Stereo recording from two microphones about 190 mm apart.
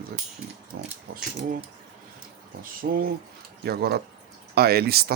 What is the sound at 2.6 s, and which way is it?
Speech, 50° right (ahead or behind).